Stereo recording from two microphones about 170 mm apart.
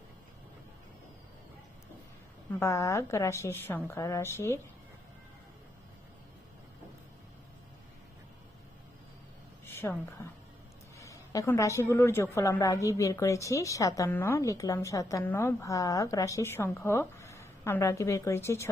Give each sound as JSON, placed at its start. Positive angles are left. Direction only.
{"t": 2.6, "sound": "a woman's voice", "side_deg": 15}
{"t": 9.7, "sound": "a woman's voice", "side_deg": 10}